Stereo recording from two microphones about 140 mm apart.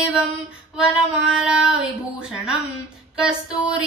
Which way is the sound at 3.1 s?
5° right (ahead or behind).